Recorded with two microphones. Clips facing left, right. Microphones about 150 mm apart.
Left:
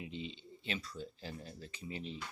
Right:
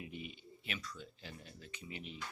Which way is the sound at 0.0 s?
25° left (ahead or behind).